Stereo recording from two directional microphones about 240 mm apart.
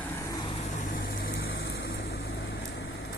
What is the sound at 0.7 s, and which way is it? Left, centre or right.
Vehicle, left.